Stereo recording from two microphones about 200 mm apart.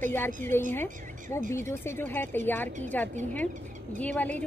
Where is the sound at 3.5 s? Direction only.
40° right (ahead or behind).